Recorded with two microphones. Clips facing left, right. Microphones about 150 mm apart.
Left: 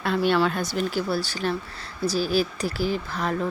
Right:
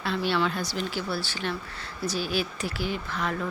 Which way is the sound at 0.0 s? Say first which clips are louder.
Left 5 dB; 50° left (ahead or behind).